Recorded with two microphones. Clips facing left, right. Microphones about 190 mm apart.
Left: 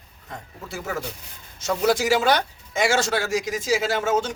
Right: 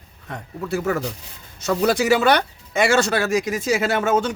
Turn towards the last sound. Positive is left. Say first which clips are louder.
# right 3 dB
turn(degrees=-60)  # may be behind; listen again after turning